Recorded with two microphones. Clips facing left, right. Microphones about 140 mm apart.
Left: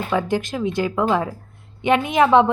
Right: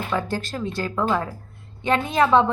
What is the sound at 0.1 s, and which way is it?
A woman's voice, 15° left (ahead or behind).